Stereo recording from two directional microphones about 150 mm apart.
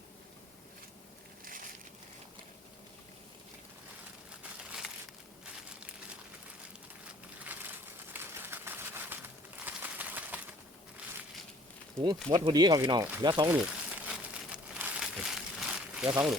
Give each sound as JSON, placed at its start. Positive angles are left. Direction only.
{"t": 1.5, "sound": "a sound", "side_deg": -65}
{"t": 7.4, "sound": "crumpling", "side_deg": -15}
{"t": 12.0, "sound": "speech", "side_deg": -30}
{"t": 13.5, "sound": "crumpling", "side_deg": -10}
{"t": 16.0, "sound": "speech", "side_deg": -10}